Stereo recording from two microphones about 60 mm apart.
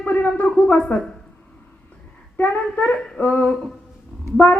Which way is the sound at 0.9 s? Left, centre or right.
Left.